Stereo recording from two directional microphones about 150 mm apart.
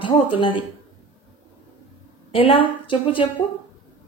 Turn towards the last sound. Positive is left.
turn(degrees=35)  # may be behind; listen again after turning